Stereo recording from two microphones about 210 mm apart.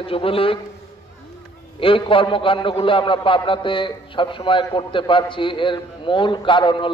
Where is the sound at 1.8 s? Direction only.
25° left (ahead or behind).